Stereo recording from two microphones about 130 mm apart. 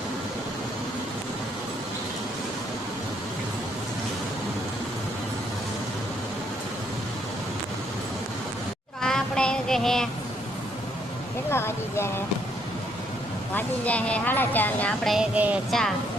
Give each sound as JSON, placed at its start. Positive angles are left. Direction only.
{"t": 9.0, "sound": "child singing", "side_deg": 5}
{"t": 11.5, "sound": "speech", "side_deg": 20}
{"t": 13.5, "sound": "speech", "side_deg": 10}
{"t": 15.1, "sound": "music", "side_deg": -10}